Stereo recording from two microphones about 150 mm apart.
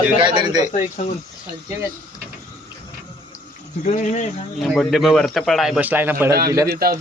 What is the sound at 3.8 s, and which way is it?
Speech, 50° left (ahead or behind).